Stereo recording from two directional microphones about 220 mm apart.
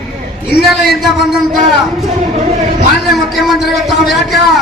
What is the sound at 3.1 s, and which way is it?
A man's voice, centre (ahead or behind).